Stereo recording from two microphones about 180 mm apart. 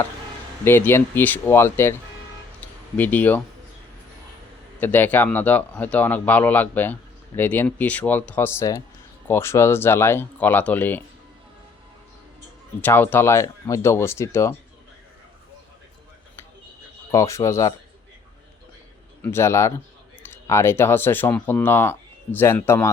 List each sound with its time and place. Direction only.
0.6 s speech: 10° left (ahead or behind)
3.0 s speech: 10° left (ahead or behind)
4.8 s speech: 10° left (ahead or behind)
12.8 s speech: 10° left (ahead or behind)
17.1 s speech: 15° left (ahead or behind)
19.2 s speech: 15° left (ahead or behind)